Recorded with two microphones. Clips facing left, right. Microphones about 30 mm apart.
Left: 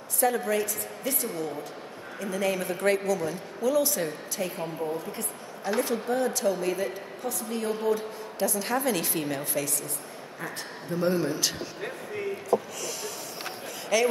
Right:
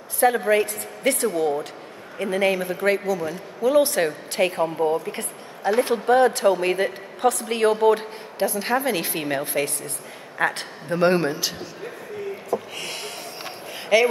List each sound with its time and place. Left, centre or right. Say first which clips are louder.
0.2 s a woman's voice: right 7 dB; right
1.0 s a woman's voice: right 11 dB; right
2.1 s a woman's voice: right 7 dB; right
2.5 s a man's voice: right 4 dB; centre
3.7 s a woman's voice: right 9 dB; right
5.6 s a man's voice: right 7 dB; right
6.0 s a woman's voice: right 9 dB; right
8.4 s a woman's voice: right 5 dB; right
10.4 s a woman's voice: right 13 dB; right
12.7 s a sound: right 3 dB; right
13.4 s a sound: right 2 dB; right